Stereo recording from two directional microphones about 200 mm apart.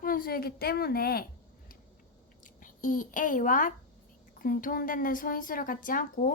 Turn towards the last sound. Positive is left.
turn(degrees=40)  # may be behind; listen again after turning